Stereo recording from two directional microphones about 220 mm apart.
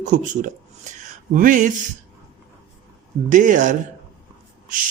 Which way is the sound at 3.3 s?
35° right (ahead or behind).